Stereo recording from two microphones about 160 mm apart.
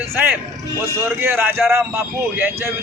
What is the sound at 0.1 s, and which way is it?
A man's voice, 15° right (ahead or behind).